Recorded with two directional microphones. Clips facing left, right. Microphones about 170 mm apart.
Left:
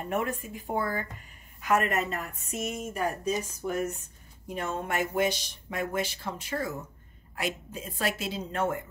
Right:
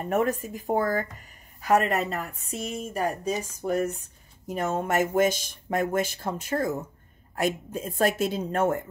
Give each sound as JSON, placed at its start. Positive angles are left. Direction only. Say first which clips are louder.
{"t": 0.1, "sound": "speech", "louder": "right 6 dB", "side_deg": -40}